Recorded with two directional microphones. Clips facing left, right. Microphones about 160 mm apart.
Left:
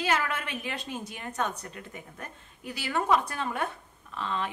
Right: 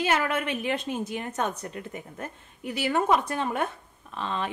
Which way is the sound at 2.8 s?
20° right (ahead or behind).